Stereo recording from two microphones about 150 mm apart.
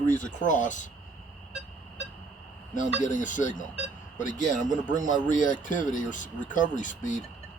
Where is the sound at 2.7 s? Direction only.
60° left (ahead or behind).